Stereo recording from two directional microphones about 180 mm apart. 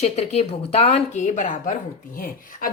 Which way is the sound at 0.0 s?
35° left (ahead or behind).